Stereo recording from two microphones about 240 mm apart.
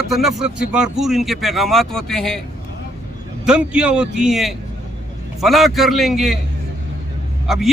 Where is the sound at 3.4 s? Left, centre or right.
Centre.